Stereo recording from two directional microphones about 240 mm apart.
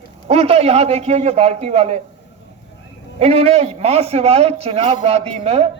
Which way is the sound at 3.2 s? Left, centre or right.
Right.